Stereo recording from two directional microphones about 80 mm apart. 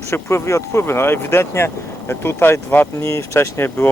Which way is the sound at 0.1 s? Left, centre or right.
Left.